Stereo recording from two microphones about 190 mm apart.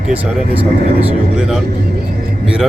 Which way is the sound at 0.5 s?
30° right (ahead or behind).